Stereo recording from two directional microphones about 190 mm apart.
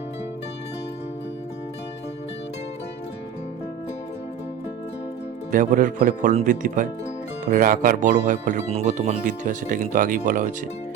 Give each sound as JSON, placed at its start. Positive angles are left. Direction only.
{"t": 5.5, "sound": "speech", "side_deg": -45}